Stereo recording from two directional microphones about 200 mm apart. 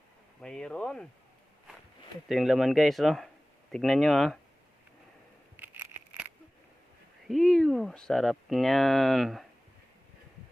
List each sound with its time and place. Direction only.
0.4 s speech: 5° left (ahead or behind)
2.3 s speech: centre (ahead or behind)
5.5 s a sound: 10° right (ahead or behind)
7.3 s speech: centre (ahead or behind)